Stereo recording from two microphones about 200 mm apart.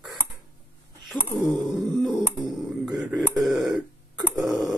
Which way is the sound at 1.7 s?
Centre (ahead or behind).